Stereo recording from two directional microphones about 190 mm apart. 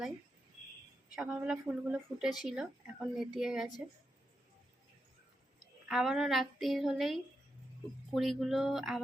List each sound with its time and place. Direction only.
1.1 s speech: 5° right (ahead or behind)
5.9 s speech: centre (ahead or behind)